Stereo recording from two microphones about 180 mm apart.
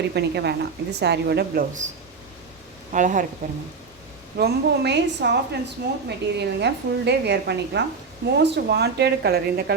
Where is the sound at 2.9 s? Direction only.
45° right (ahead or behind).